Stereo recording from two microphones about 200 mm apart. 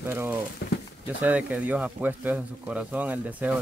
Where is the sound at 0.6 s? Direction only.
55° left (ahead or behind).